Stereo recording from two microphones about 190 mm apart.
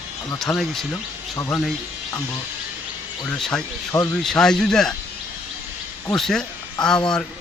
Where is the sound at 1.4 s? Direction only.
15° left (ahead or behind).